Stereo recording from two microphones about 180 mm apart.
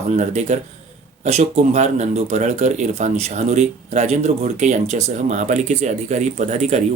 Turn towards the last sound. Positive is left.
turn(degrees=-40)  # may be behind; listen again after turning